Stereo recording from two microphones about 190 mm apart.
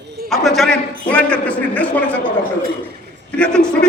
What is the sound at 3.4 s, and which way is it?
Speech, 5° left (ahead or behind).